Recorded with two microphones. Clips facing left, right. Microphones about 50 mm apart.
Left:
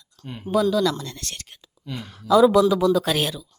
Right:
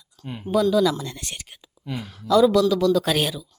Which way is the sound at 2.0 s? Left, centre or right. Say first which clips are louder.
Left 1 dB; centre.